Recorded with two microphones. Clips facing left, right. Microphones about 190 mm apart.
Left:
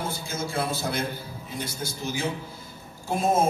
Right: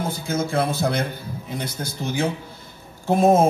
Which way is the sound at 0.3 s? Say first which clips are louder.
Right 8 dB; 60° right (ahead or behind).